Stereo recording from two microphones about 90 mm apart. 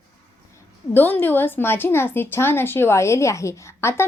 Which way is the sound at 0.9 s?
20° left (ahead or behind).